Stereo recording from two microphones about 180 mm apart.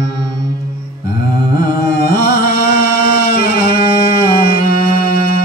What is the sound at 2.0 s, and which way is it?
Music, 55° left (ahead or behind).